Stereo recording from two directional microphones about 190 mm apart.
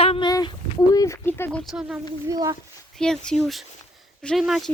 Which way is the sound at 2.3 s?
20° right (ahead or behind).